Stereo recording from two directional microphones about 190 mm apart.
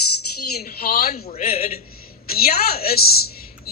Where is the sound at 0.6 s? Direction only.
55° left (ahead or behind).